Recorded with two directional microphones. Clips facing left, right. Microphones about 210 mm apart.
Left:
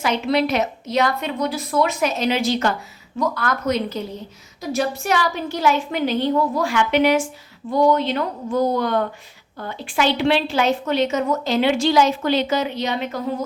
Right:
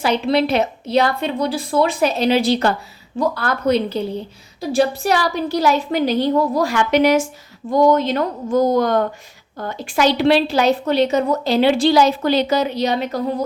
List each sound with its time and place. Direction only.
0.0 s a woman's voice: 30° right (ahead or behind)